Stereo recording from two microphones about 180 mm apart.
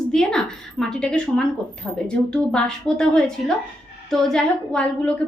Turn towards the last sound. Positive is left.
turn(degrees=5)  # may be behind; listen again after turning